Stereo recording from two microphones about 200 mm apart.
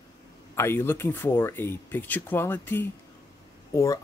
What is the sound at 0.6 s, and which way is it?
Speech, 10° left (ahead or behind).